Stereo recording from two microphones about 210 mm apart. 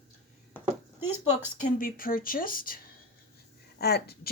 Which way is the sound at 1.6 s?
40° left (ahead or behind).